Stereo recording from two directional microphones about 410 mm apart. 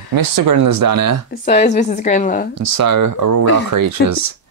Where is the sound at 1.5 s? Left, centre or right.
Centre.